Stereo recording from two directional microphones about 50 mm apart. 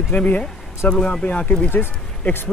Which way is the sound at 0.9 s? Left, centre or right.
Centre.